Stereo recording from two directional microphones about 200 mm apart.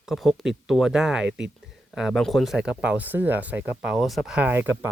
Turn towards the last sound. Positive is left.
turn(degrees=-10)  # may be behind; listen again after turning